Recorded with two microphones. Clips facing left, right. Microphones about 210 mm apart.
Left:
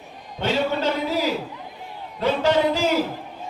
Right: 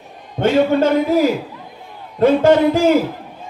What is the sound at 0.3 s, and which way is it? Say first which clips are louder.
A man's voice: right 9 dB; 55° right (ahead or behind).